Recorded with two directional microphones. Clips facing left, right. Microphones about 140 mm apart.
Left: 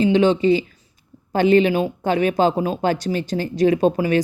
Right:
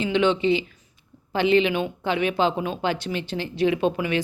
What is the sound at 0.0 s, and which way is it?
Speech, 35° left (ahead or behind).